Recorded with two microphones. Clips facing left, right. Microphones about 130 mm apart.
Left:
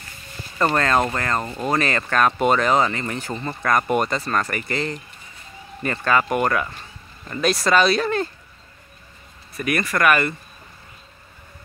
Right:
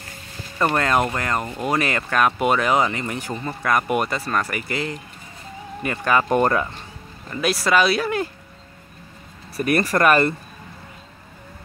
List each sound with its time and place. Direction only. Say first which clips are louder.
0.6 s speech: even; 10° right (ahead or behind)
6.2 s speech: right 3 dB; 30° right (ahead or behind)
7.3 s speech: left 1 dB; 5° right (ahead or behind)
9.6 s speech: right 3 dB; 35° right (ahead or behind)